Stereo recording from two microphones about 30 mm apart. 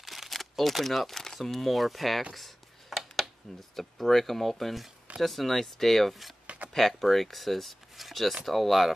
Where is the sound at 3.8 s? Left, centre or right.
Centre.